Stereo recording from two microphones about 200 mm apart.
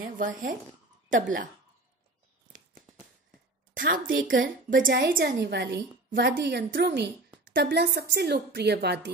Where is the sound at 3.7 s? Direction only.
45° right (ahead or behind).